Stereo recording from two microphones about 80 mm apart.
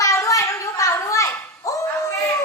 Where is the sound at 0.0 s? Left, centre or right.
Left.